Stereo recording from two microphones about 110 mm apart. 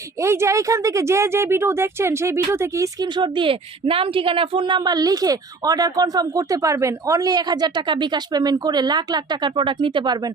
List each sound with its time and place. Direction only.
0.2 s speech: 25° right (ahead or behind)
3.1 s speech: 45° right (ahead or behind)